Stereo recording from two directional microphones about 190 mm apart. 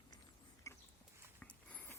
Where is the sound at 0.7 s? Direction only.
15° left (ahead or behind).